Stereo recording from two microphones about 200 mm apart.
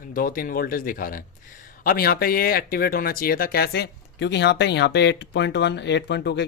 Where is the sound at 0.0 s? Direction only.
45° left (ahead or behind).